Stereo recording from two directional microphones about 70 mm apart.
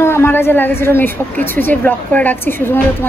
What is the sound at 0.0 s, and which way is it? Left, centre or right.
A woman's voice, left.